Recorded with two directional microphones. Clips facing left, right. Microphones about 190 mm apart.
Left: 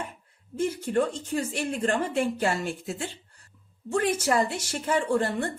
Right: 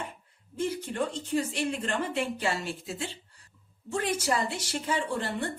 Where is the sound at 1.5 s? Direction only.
45° left (ahead or behind).